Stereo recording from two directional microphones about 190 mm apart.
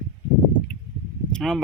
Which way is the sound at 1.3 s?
5° left (ahead or behind).